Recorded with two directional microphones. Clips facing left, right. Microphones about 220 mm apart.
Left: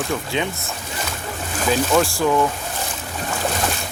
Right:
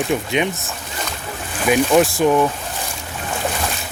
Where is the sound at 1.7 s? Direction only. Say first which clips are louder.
Right 4 dB; 20° right (ahead or behind).